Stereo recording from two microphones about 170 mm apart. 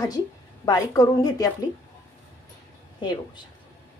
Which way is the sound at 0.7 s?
20° left (ahead or behind).